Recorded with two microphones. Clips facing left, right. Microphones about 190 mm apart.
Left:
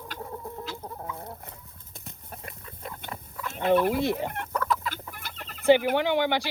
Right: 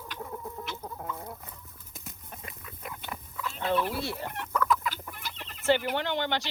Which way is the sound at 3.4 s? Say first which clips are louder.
Left 3 dB; 50° left (ahead or behind).